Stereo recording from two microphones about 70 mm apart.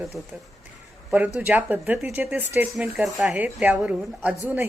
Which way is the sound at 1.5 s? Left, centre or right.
Right.